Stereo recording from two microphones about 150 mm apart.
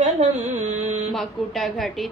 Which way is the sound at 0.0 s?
50° right (ahead or behind).